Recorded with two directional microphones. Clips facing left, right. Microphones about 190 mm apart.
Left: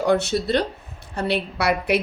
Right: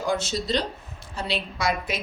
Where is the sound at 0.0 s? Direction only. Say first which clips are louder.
Left 7 dB; 65° left (ahead or behind).